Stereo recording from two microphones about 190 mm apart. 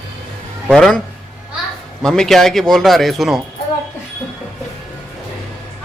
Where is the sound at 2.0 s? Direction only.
5° left (ahead or behind).